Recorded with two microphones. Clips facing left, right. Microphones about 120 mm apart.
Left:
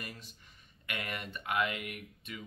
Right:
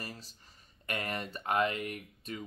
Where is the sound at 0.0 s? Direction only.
35° right (ahead or behind).